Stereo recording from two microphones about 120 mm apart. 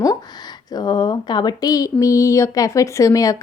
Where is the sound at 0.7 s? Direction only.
35° left (ahead or behind).